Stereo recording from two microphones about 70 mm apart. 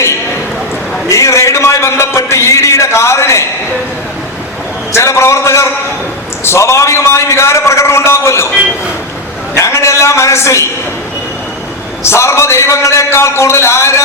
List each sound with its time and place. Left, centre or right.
1.1 s a sound: left
4.9 s a man's voice: left
9.6 s a man's voice: left
12.0 s a man's voice: left